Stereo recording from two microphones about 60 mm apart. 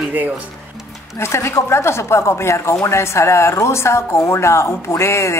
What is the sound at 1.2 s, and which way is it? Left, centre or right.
A woman's voice, left.